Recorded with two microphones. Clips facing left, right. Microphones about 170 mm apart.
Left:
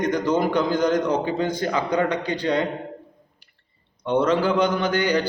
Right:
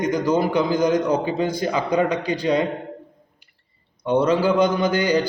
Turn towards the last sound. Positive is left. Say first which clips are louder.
# right 2 dB
turn(degrees=-10)  # may be behind; listen again after turning